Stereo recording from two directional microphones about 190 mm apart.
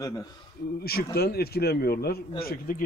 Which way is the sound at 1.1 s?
55° left (ahead or behind).